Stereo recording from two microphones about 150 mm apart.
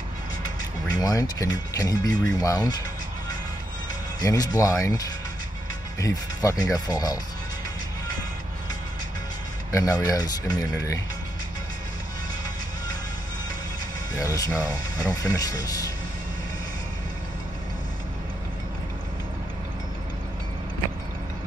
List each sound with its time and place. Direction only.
0.9 s speech: 25° left (ahead or behind)
4.2 s speech: 25° left (ahead or behind)
9.7 s speech: 20° left (ahead or behind)
14.2 s speech: 25° left (ahead or behind)